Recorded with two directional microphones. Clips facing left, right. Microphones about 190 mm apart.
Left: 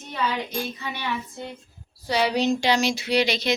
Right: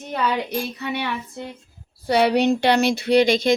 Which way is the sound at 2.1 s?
60° right (ahead or behind).